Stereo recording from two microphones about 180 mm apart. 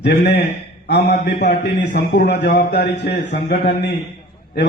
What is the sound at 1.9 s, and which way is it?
A man's voice, 50° left (ahead or behind).